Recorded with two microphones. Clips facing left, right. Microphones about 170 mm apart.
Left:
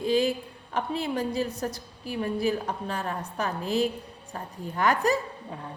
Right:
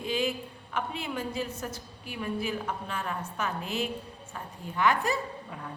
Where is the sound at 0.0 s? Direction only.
35° left (ahead or behind).